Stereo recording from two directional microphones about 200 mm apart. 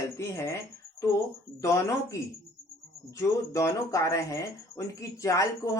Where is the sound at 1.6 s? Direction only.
15° left (ahead or behind).